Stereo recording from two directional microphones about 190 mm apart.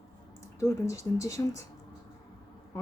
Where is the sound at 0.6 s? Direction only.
15° left (ahead or behind).